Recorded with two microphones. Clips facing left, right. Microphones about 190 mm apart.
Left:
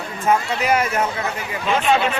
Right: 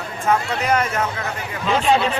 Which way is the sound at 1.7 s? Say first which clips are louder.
Right 1 dB; 35° right (ahead or behind).